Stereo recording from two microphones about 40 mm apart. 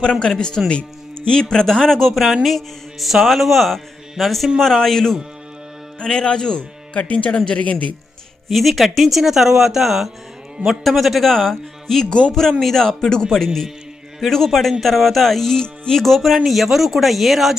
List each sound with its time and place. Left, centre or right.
0.0 s a man's voice: left; by 2.3 s centre
2.4 s mantra: centre
3.1 s a man's voice: centre; by 6.7 s left
7.1 s speech: left
8.4 s speech: centre